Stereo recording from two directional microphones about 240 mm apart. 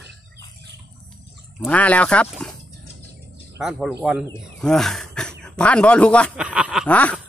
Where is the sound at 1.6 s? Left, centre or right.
Centre.